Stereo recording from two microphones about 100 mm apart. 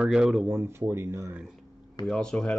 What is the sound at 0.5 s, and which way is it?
Speech, 25° right (ahead or behind).